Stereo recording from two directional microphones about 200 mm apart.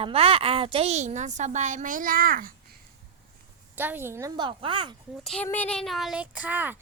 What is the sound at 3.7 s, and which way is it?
Speech, 10° right (ahead or behind).